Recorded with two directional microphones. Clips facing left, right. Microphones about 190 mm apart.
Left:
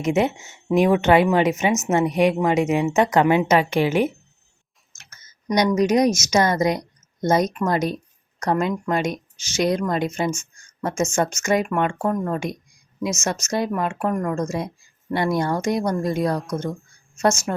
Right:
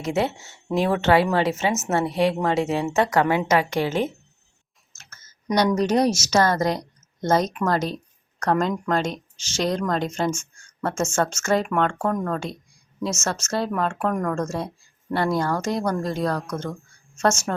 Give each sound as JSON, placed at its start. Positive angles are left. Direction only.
{"t": 0.0, "sound": "speech", "side_deg": 20}
{"t": 4.9, "sound": "clicking", "side_deg": 15}
{"t": 5.6, "sound": "a woman's voice", "side_deg": 10}
{"t": 10.3, "sound": "a sound", "side_deg": -10}
{"t": 10.8, "sound": "speech", "side_deg": 10}
{"t": 16.9, "sound": "a sound", "side_deg": 10}